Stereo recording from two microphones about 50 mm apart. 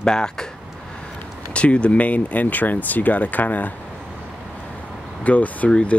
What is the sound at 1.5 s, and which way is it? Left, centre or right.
Speech, left.